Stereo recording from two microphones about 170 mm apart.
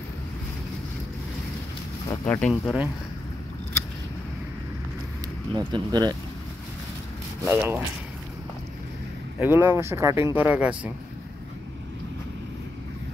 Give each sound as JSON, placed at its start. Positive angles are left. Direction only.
{"t": 2.0, "sound": "speech", "side_deg": 20}
{"t": 2.4, "sound": "speech", "side_deg": 5}
{"t": 5.5, "sound": "speech", "side_deg": -25}
{"t": 7.4, "sound": "speech", "side_deg": -10}
{"t": 9.4, "sound": "speech", "side_deg": -10}